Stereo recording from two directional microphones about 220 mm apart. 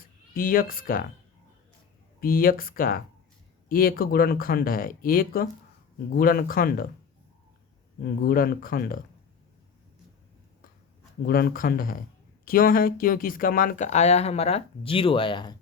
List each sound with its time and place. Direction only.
0.3 s speech: 40° left (ahead or behind)
2.2 s speech: 40° left (ahead or behind)
8.2 s speech: 40° left (ahead or behind)
11.3 s speech: 45° left (ahead or behind); by 15.5 s 20° left (ahead or behind)